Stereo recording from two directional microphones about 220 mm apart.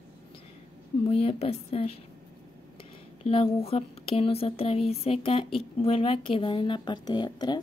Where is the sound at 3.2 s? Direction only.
25° left (ahead or behind).